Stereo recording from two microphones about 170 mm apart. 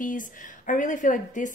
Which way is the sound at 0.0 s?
50° left (ahead or behind).